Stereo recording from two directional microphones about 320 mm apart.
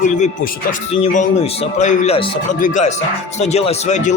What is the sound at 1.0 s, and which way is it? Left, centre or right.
A man's voice, left.